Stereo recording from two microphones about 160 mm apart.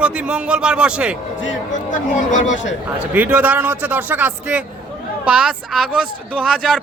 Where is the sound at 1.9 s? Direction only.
50° left (ahead or behind).